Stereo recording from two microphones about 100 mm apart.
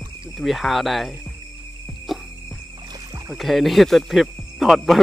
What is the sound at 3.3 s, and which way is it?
Speech, centre (ahead or behind).